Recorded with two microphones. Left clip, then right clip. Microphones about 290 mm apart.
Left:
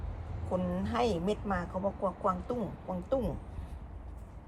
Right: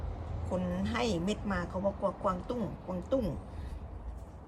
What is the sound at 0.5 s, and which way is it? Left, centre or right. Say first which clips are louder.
A woman's voice: left 2 dB; centre.